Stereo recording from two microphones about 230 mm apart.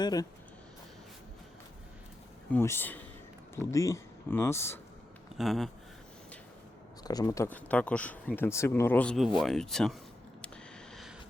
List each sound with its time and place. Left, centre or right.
0.0 s speech: centre
2.5 s speech: centre
5.4 s speech: centre
7.0 s speech: centre
10.4 s a sound: centre